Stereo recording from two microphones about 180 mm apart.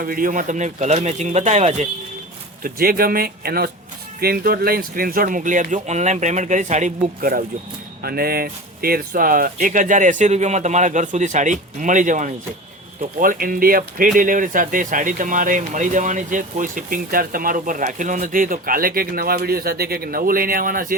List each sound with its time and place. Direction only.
0.0 s speech: 50° right (ahead or behind)
2.6 s speech: 55° right (ahead or behind)